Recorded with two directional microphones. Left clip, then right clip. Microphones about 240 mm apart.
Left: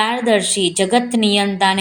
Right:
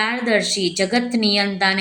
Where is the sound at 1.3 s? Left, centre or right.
Centre.